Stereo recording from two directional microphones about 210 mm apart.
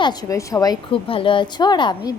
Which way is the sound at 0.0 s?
20° left (ahead or behind).